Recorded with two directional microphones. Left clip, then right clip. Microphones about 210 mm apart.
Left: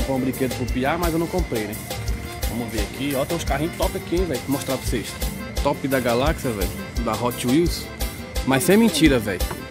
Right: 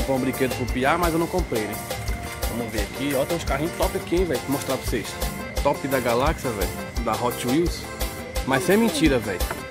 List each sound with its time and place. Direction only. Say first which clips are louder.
0.1 s speech: right 1 dB; 5° right (ahead or behind)
2.7 s speech: even; centre (ahead or behind)
5.7 s speech: left 1 dB; 15° left (ahead or behind)
6.6 s speech: even; centre (ahead or behind)
8.5 s speech: left 2 dB; 15° left (ahead or behind)